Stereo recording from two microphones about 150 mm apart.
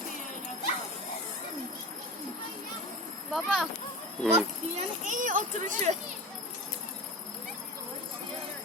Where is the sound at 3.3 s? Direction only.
Centre (ahead or behind).